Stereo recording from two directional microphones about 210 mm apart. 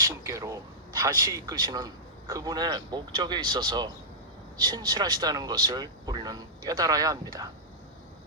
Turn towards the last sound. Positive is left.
turn(degrees=-15)  # may be behind; listen again after turning